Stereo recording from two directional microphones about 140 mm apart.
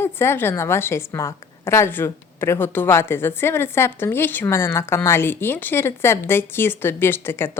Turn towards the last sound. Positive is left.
turn(degrees=15)  # may be behind; listen again after turning